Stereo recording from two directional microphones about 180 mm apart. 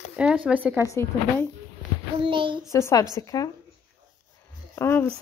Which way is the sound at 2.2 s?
30° right (ahead or behind).